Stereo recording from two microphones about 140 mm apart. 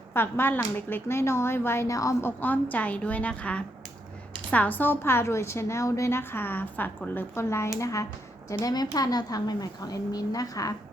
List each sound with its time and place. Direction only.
0.1 s a woman's voice: 15° left (ahead or behind)
2.4 s a woman's voice: 10° left (ahead or behind)